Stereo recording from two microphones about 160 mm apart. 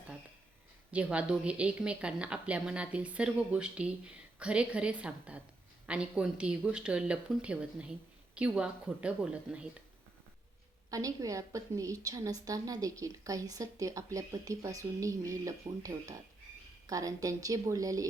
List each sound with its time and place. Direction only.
0.9 s a woman's voice: 10° right (ahead or behind)
10.9 s a woman's voice: 20° right (ahead or behind)